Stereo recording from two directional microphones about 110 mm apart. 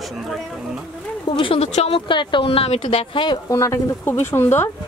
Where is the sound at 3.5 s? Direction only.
30° left (ahead or behind).